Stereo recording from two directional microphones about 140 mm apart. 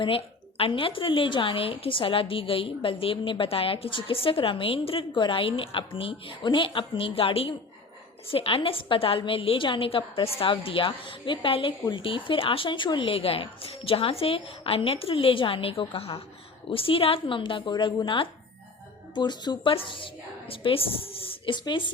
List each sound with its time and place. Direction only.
0.0 s a woman's voice: 40° left (ahead or behind)